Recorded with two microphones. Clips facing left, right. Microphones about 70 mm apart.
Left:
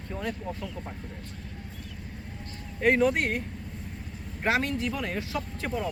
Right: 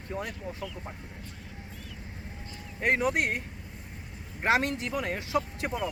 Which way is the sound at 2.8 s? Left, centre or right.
Centre.